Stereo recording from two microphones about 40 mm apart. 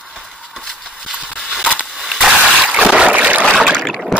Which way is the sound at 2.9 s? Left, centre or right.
Right.